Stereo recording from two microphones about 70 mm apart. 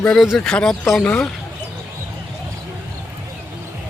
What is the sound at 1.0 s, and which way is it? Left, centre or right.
Speech, centre.